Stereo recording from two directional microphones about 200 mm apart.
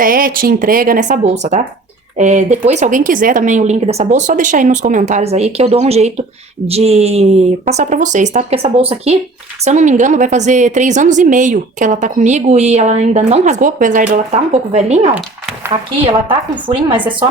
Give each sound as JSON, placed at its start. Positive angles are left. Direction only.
{"t": 0.0, "sound": "a woman's voice", "side_deg": -45}
{"t": 15.1, "sound": "speech", "side_deg": -5}